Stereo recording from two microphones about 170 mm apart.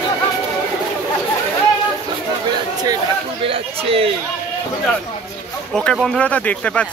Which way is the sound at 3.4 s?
35° right (ahead or behind).